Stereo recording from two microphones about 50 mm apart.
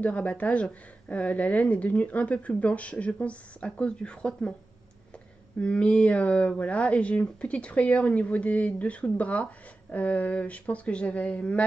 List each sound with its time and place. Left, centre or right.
0.0 s speech: left
5.6 s speech: left